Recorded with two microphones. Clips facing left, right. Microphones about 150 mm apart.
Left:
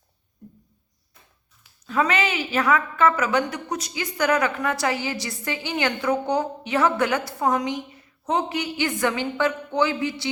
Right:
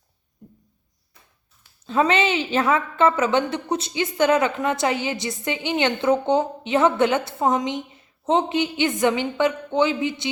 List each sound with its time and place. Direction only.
1.9 s a woman's voice: 25° right (ahead or behind)